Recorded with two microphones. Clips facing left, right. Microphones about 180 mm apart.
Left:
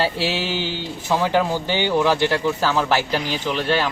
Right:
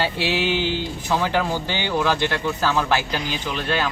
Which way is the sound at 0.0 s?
30° left (ahead or behind).